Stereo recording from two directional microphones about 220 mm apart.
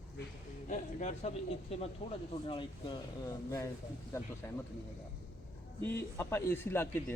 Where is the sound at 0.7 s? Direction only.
35° left (ahead or behind); by 4.3 s 15° left (ahead or behind).